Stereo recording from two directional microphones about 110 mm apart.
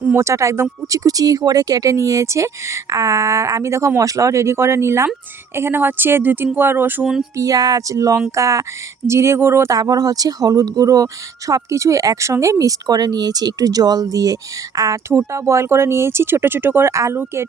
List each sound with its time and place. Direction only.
0.1 s speech: 25° right (ahead or behind)
7.0 s speech: 5° right (ahead or behind)
7.3 s speech: 30° right (ahead or behind)
9.7 s speech: 35° right (ahead or behind)